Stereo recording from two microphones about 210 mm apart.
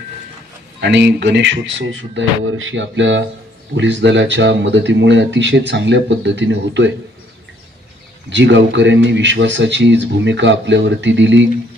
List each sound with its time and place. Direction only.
0.7 s speech: 55° right (ahead or behind)
8.3 s speech: 60° right (ahead or behind)